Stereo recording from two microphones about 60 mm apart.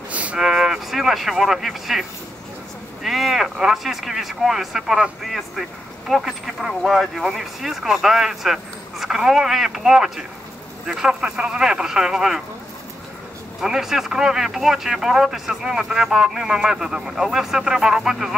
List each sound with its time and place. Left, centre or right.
0.1 s a sound: right
0.4 s speech: centre
13.6 s speech: centre